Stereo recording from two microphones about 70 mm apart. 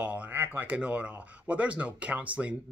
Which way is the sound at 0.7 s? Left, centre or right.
Centre.